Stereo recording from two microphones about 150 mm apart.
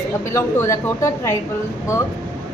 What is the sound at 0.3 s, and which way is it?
A woman's voice, 20° left (ahead or behind).